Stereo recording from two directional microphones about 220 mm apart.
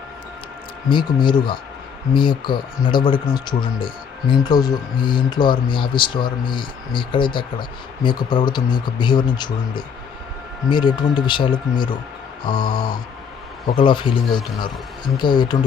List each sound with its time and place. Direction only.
0.9 s speech: 20° left (ahead or behind)
13.7 s speech: 20° left (ahead or behind)